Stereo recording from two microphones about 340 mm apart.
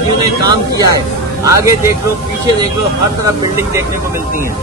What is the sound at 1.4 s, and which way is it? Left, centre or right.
Speech, centre.